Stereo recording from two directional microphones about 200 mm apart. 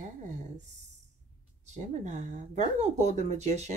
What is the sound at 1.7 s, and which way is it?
Speech, 35° right (ahead or behind).